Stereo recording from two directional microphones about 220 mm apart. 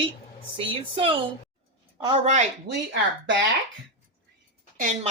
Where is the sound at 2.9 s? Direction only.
55° right (ahead or behind).